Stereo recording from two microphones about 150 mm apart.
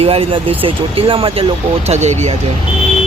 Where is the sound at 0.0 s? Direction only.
40° right (ahead or behind).